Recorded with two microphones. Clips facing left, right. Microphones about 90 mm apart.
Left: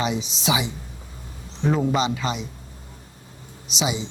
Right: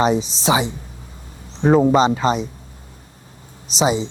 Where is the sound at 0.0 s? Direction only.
40° right (ahead or behind).